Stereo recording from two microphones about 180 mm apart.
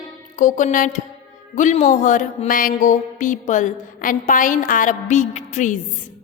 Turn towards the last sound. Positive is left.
turn(degrees=40)  # may be behind; listen again after turning